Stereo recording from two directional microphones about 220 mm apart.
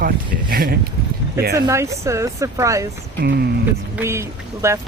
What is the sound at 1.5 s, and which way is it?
Speech, 15° right (ahead or behind).